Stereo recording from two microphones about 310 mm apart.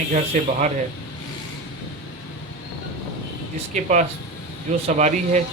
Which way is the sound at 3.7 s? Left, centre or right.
Right.